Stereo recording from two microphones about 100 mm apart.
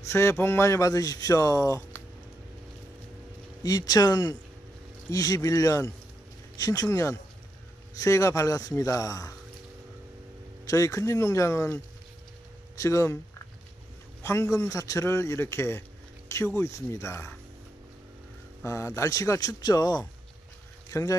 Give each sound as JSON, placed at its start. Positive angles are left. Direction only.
{"t": 0.0, "sound": "speech", "side_deg": 25}
{"t": 3.6, "sound": "speech", "side_deg": 40}
{"t": 10.7, "sound": "speech", "side_deg": 35}
{"t": 14.2, "sound": "speech", "side_deg": 25}
{"t": 18.6, "sound": "speech", "side_deg": 30}